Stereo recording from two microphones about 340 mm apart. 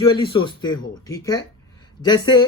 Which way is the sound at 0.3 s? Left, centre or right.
Centre.